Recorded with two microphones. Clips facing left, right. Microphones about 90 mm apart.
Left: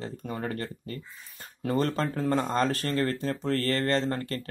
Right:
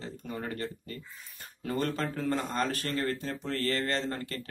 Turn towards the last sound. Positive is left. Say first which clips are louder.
# left 5 dB
turn(degrees=40)  # may be behind; listen again after turning